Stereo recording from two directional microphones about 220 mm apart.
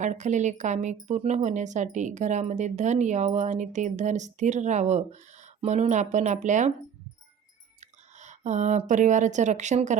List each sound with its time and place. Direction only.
0.0 s speech: 35° right (ahead or behind)
7.8 s speech: 35° right (ahead or behind)